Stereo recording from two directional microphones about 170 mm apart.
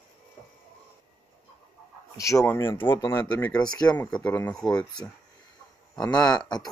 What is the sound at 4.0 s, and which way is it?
Speech, 5° left (ahead or behind).